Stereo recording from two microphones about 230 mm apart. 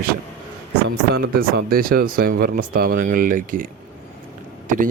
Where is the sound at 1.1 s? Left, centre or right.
Right.